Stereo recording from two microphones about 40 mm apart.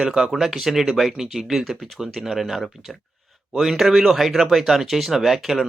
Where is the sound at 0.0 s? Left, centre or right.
Centre.